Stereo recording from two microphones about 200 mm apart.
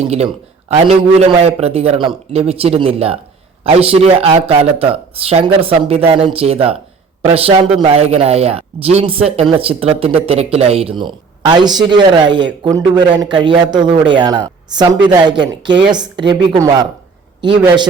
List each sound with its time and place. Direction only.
0.7 s speech: 30° right (ahead or behind)